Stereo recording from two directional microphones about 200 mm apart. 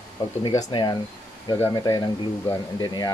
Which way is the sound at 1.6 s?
20° left (ahead or behind).